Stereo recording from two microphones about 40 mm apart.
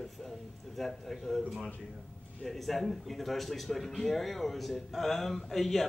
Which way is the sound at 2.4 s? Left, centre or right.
Centre.